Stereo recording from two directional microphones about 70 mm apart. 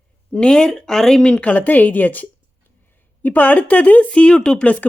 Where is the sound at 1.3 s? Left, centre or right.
Left.